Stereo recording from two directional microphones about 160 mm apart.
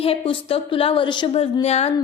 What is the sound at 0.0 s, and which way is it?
A woman's voice, 35° left (ahead or behind).